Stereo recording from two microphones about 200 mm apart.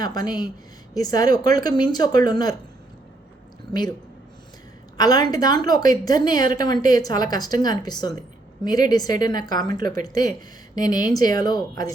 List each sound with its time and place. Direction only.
0.0 s a woman's voice: 20° left (ahead or behind)
3.7 s speech: 20° left (ahead or behind)
4.9 s a woman's voice: 20° left (ahead or behind)